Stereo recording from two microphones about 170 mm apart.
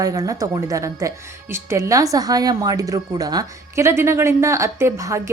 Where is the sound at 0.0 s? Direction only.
20° right (ahead or behind).